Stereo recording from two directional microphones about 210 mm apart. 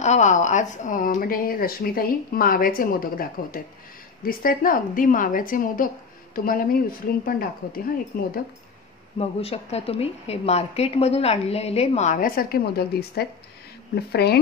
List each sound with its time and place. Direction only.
0.0 s a woman's voice: 35° left (ahead or behind)
9.2 s speech: 30° left (ahead or behind); by 14.4 s 50° left (ahead or behind)